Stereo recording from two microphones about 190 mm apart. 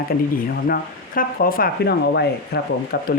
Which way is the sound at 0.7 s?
50° left (ahead or behind).